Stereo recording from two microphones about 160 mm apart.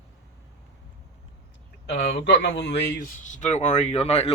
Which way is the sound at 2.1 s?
90° left.